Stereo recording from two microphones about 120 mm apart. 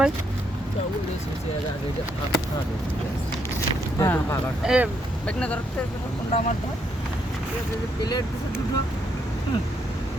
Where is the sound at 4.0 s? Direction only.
25° left (ahead or behind).